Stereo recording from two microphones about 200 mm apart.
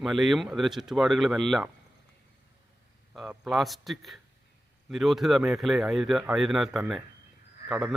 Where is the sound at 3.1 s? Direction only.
Centre (ahead or behind).